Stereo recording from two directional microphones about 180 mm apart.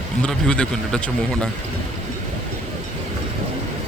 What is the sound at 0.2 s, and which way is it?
Speech, 5° left (ahead or behind).